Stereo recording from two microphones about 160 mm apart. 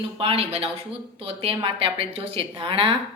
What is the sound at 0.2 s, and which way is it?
A woman's voice, 40° right (ahead or behind).